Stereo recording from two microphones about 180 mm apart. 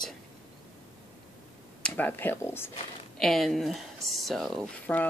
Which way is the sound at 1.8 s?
10° left (ahead or behind).